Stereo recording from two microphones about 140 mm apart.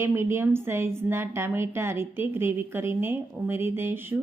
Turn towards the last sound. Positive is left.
turn(degrees=-15)  # may be behind; listen again after turning